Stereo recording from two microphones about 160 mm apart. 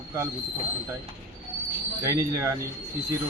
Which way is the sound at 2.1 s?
15° right (ahead or behind).